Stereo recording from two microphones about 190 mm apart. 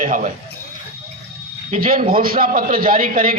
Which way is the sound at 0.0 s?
40° right (ahead or behind).